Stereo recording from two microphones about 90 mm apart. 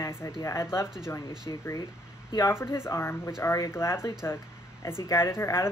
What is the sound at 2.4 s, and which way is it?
Speech, 25° left (ahead or behind).